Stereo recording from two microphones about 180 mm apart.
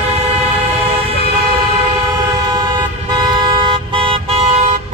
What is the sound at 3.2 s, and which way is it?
Vehicle, 25° right (ahead or behind).